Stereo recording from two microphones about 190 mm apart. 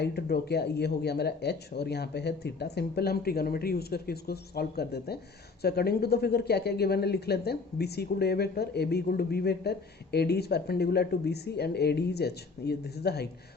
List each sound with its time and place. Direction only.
0.0 s speech: 55° left (ahead or behind)